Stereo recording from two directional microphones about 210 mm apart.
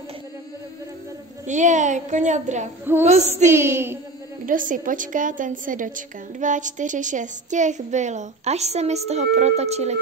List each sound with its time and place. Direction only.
1.5 s a woman's voice: 35° right (ahead or behind)
2.8 s child singing: 10° right (ahead or behind)
4.5 s a woman's voice: 40° right (ahead or behind)